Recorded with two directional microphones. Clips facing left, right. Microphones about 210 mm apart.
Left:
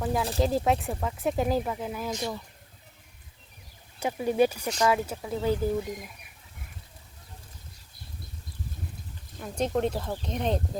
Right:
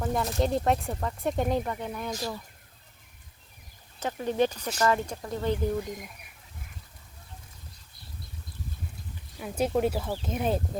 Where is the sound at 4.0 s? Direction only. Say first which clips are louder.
Left 3 dB; 10° left (ahead or behind).